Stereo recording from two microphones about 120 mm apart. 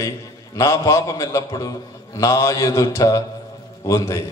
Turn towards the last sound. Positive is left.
turn(degrees=25)  # may be behind; listen again after turning